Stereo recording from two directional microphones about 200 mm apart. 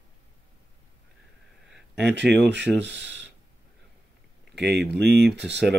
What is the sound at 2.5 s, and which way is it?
Speech, 60° right (ahead or behind).